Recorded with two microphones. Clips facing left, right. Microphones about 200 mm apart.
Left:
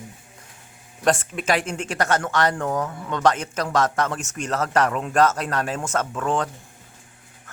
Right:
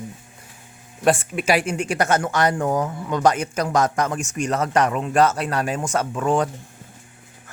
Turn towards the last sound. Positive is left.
turn(degrees=-10)  # may be behind; listen again after turning